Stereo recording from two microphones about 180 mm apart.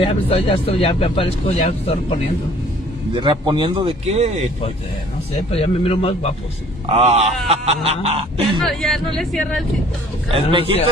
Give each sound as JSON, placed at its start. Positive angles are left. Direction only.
{"t": 0.0, "sound": "speech", "side_deg": 30}
{"t": 3.2, "sound": "a man's voice", "side_deg": -25}
{"t": 5.3, "sound": "speech", "side_deg": 35}
{"t": 6.9, "sound": "speech", "side_deg": -35}
{"t": 8.6, "sound": "speech", "side_deg": 0}